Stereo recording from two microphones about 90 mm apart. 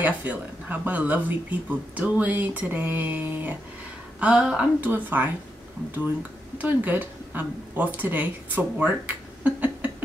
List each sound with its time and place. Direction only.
0.0 s speech: 20° right (ahead or behind)
6.6 s a woman's voice: 20° right (ahead or behind)